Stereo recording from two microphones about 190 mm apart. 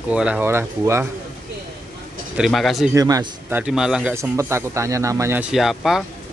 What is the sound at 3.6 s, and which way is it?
Speech, 5° right (ahead or behind).